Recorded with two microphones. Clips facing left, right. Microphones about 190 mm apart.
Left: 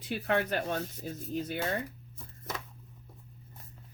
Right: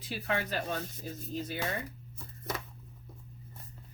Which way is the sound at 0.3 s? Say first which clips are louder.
Left 3 dB; 55° left (ahead or behind).